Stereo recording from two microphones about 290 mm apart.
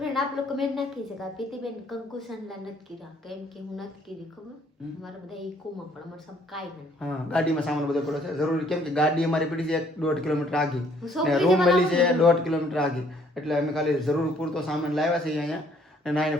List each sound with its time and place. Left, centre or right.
0.0 s a woman's voice: centre
5.0 s a woman's voice: centre
6.5 s a woman's voice: centre